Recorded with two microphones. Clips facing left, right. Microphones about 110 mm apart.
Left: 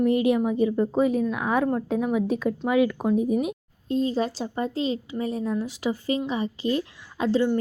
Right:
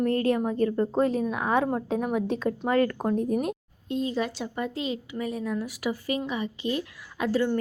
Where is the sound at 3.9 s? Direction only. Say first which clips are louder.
Left 4 dB; 35° left (ahead or behind).